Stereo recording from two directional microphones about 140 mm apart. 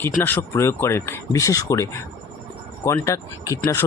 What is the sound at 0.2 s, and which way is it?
Speech, 15° left (ahead or behind).